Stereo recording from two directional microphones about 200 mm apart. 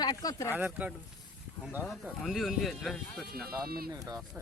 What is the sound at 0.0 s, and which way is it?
Speech, 20° left (ahead or behind).